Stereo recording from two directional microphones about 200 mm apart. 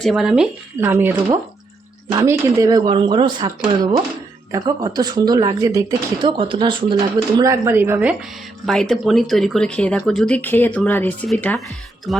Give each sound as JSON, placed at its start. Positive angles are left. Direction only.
{"t": 0.0, "sound": "speech", "side_deg": 0}